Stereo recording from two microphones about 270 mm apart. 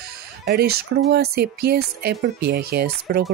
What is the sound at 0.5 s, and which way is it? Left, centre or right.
Speech, right.